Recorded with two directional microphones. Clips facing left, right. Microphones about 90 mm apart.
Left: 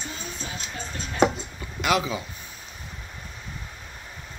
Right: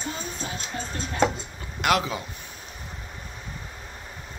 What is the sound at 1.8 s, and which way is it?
Speech, 55° right (ahead or behind).